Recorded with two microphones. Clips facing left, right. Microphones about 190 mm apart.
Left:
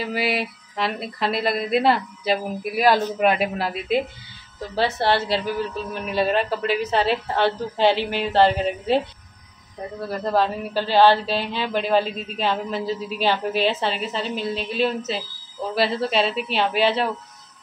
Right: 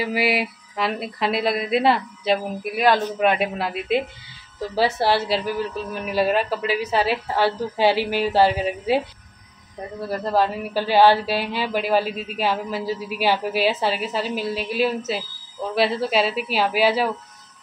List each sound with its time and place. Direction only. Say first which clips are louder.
0.0 s a woman's voice: right 2 dB; 5° right (ahead or behind)
10.0 s a woman's voice: right 1 dB; 5° right (ahead or behind)